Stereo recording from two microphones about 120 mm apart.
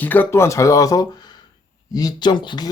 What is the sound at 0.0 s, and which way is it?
Speech, 15° left (ahead or behind).